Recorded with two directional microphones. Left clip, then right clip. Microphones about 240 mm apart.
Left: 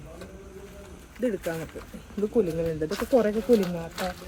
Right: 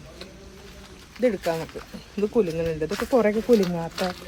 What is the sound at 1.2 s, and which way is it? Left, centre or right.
Speech, right.